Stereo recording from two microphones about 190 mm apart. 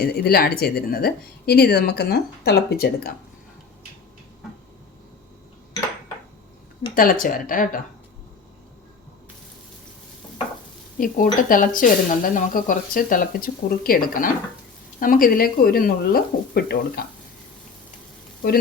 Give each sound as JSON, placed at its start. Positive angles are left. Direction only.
{"t": 0.0, "sound": "speech", "side_deg": 55}
{"t": 6.9, "sound": "speech", "side_deg": 50}
{"t": 10.9, "sound": "speech", "side_deg": 45}